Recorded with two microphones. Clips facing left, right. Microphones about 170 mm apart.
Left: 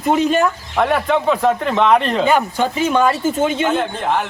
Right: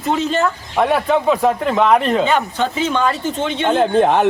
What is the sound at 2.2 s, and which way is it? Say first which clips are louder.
Speech: left 1 dB; 10° left (ahead or behind).